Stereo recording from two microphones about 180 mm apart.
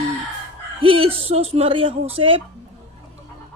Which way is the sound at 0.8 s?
30° right (ahead or behind).